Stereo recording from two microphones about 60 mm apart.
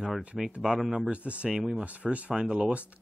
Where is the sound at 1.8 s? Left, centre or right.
Right.